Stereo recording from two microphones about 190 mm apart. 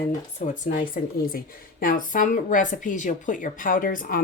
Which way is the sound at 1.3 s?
50° left (ahead or behind).